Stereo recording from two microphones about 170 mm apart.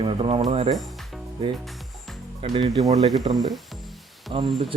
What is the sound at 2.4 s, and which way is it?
Speech, 25° right (ahead or behind).